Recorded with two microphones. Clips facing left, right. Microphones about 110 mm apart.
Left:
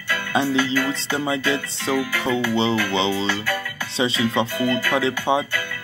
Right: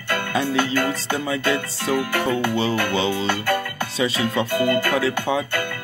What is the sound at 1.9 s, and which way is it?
Music, 50° right (ahead or behind).